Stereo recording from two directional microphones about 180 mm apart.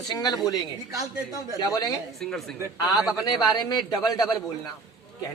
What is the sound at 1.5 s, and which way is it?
Speech, 20° left (ahead or behind).